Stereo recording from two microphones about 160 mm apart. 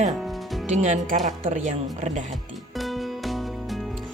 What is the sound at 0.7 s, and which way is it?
Speech, 45° right (ahead or behind).